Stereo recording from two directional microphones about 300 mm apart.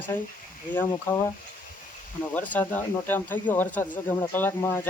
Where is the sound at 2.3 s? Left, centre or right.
Centre.